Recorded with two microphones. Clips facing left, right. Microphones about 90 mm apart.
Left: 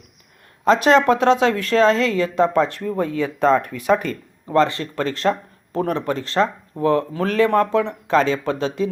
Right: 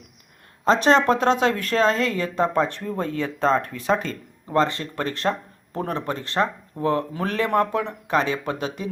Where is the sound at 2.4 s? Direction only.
15° right (ahead or behind).